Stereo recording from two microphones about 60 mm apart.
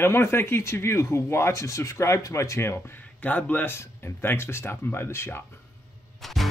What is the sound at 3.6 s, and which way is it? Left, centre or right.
Speech, left.